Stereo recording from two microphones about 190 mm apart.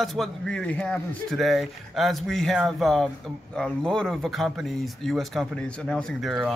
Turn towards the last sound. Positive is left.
turn(degrees=0)  # may be behind; listen again after turning